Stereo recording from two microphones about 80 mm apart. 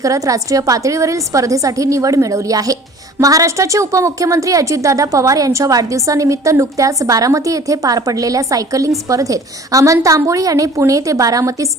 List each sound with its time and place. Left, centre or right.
0.0 s a woman's voice: right